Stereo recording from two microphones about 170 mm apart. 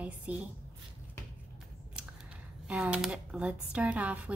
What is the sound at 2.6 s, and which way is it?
Speech, 5° right (ahead or behind).